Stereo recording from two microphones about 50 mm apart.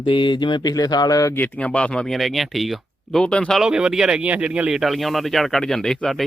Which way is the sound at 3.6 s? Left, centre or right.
Centre.